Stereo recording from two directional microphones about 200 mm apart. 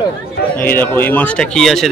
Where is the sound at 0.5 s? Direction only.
10° left (ahead or behind).